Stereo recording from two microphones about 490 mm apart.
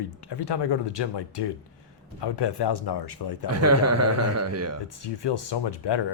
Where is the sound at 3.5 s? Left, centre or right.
Right.